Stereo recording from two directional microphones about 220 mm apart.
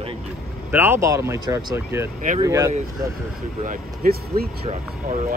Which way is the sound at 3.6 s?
45° right (ahead or behind).